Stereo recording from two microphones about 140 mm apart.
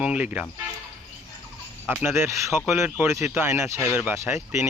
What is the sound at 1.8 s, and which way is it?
Speech, 15° right (ahead or behind).